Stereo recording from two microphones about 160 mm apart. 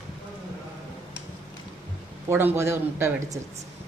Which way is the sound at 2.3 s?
15° right (ahead or behind).